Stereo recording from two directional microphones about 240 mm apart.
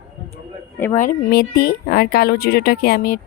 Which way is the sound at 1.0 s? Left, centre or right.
Left.